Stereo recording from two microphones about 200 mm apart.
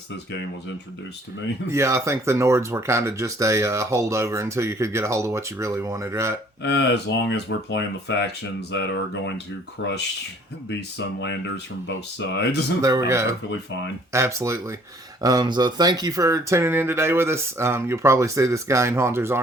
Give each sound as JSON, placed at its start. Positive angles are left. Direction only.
{"t": 1.6, "sound": "speech", "side_deg": -15}
{"t": 6.6, "sound": "speech", "side_deg": 60}
{"t": 12.8, "sound": "speech", "side_deg": -15}